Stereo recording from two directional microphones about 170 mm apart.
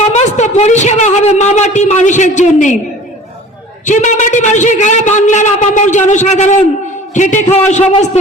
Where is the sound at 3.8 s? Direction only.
45° left (ahead or behind).